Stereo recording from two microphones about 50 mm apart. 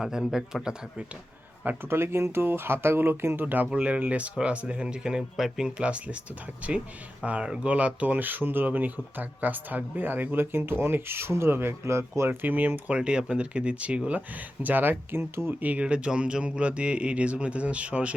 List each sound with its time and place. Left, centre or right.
0.0 s speech: centre
1.6 s speech: right
3.4 s speech: right
11.9 s speech: right
12.4 s speech: right
13.0 s speech: centre
14.2 s speech: right
15.6 s speech: right